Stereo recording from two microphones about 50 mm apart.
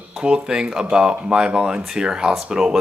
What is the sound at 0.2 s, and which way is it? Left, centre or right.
Speech, centre.